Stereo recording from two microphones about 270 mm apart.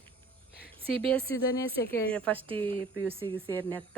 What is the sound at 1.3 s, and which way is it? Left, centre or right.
Speech, centre.